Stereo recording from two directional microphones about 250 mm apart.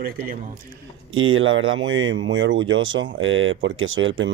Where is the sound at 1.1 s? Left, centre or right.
Right.